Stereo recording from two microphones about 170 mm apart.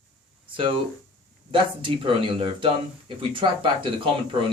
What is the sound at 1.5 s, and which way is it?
Speech, 30° right (ahead or behind).